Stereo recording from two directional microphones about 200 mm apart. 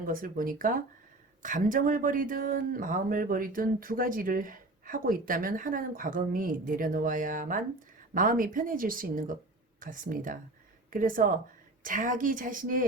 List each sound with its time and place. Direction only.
0.0 s speech: 45° right (ahead or behind)